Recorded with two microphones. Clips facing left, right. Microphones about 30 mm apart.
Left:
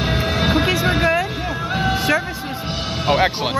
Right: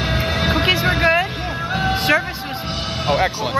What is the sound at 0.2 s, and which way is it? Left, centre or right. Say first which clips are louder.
Vehicle: left 1 dB; centre.